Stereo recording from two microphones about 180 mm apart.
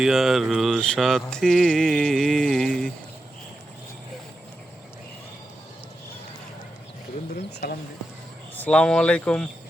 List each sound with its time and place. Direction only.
0.0 s mantra: centre (ahead or behind)
7.6 s speech: 60° left (ahead or behind)
8.5 s mantra: 5° left (ahead or behind)